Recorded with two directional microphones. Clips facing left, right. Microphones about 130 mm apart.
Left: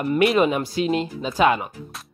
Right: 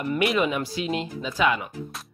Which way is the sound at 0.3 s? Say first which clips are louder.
Left 5 dB; 40° left (ahead or behind).